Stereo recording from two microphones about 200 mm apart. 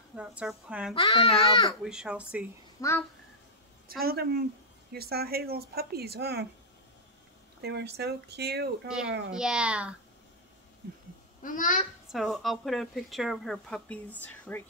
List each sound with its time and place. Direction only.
0.1 s speech: 5° right (ahead or behind)
0.9 s a child's voice: 25° left (ahead or behind)
1.9 s speech: 5° right (ahead or behind)
2.8 s a child's voice: 15° left (ahead or behind)
3.8 s speech: 50° right (ahead or behind)
7.6 s speech: 55° right (ahead or behind)
8.8 s speech: 5° right (ahead or behind)
11.4 s a child's voice: 40° left (ahead or behind)
12.1 s speech: centre (ahead or behind)